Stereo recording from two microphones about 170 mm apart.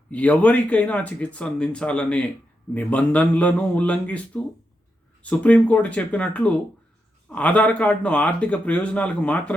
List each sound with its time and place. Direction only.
0.1 s speech: 10° left (ahead or behind)